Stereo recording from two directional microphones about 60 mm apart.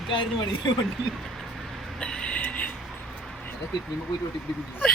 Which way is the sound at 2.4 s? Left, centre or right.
Left.